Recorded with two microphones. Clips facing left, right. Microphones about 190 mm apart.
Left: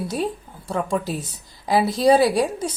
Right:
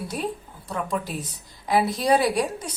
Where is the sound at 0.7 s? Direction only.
30° left (ahead or behind).